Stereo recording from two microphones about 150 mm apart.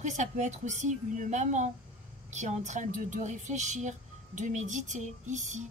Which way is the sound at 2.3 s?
55° right (ahead or behind).